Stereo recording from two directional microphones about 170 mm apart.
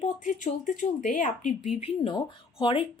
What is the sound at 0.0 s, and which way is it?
Speech, 50° left (ahead or behind).